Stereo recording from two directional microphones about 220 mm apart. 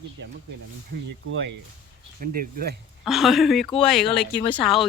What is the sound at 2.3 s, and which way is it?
Speech, 40° right (ahead or behind).